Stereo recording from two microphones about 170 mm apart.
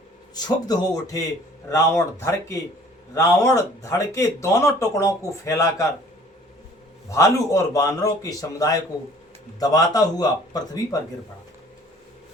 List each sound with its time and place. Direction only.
0.3 s a man's voice: 25° left (ahead or behind)
7.1 s a man's voice: 20° left (ahead or behind)